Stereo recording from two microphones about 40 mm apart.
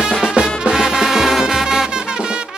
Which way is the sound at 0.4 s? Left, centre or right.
Centre.